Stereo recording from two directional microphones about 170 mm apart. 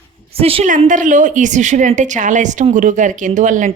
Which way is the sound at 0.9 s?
50° right (ahead or behind).